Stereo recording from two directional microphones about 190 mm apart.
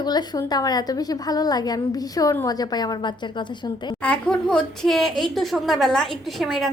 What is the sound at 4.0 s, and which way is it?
A woman's voice, 5° left (ahead or behind).